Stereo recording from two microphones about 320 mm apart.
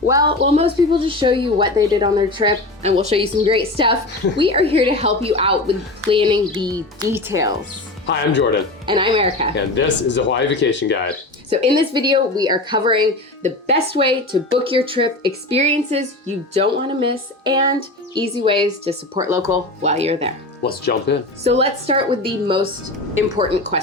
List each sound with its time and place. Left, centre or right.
0.1 s speech: centre
8.0 s speech: left
8.9 s speech: centre
9.6 s speech: left
11.4 s a woman's voice: centre
19.8 s a woman's voice: centre
20.7 s speech: left
21.4 s speech: centre